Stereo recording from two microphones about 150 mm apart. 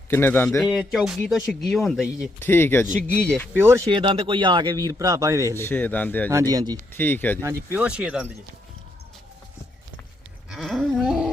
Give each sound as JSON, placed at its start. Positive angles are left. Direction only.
{"t": 0.1, "sound": "a man's voice", "side_deg": 15}
{"t": 0.6, "sound": "speech", "side_deg": 0}
{"t": 2.4, "sound": "a man's voice", "side_deg": 15}
{"t": 3.5, "sound": "speech", "side_deg": -15}
{"t": 3.9, "sound": "a man's voice", "side_deg": -35}
{"t": 5.5, "sound": "a man's voice", "side_deg": 15}
{"t": 6.3, "sound": "a man's voice", "side_deg": -25}
{"t": 6.9, "sound": "a man's voice", "side_deg": 15}
{"t": 7.4, "sound": "speech", "side_deg": -10}
{"t": 10.5, "sound": "cattle", "side_deg": 0}